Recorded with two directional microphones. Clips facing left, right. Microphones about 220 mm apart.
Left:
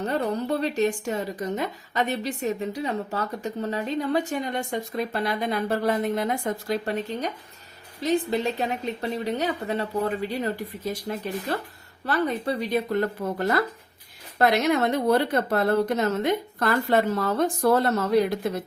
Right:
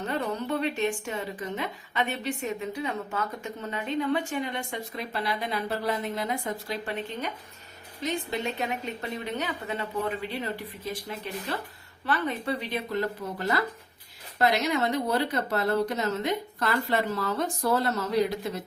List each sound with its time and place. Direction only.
0.1 s a woman's voice: 40° left (ahead or behind)
11.1 s a woman's voice: 45° left (ahead or behind)